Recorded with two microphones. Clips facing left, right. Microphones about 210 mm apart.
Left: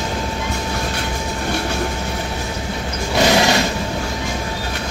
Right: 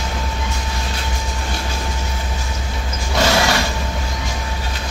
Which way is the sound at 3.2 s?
15° left (ahead or behind).